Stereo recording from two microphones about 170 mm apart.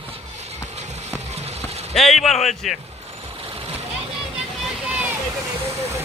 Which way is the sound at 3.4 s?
35° right (ahead or behind).